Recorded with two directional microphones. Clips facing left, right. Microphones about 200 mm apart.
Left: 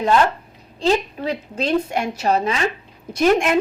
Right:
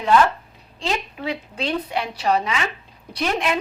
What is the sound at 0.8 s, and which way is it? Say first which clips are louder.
A woman's voice: left 7 dB; 40° left (ahead or behind).